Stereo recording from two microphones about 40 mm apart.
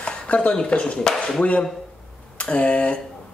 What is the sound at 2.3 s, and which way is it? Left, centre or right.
Speech, left.